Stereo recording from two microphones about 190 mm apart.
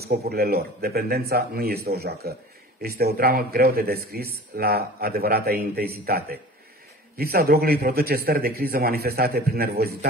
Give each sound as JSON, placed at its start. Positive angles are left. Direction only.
{"t": 0.0, "sound": "a man's voice", "side_deg": -55}